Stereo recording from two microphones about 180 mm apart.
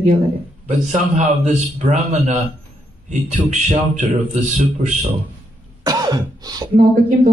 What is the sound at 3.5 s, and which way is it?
Speech, 40° right (ahead or behind).